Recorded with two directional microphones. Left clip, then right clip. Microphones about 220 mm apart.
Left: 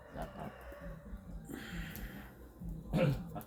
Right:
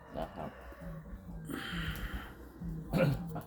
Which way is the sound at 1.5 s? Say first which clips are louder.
Right 7 dB; 15° right (ahead or behind).